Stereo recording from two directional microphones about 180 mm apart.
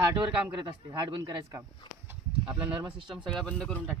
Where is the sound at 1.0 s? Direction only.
25° right (ahead or behind).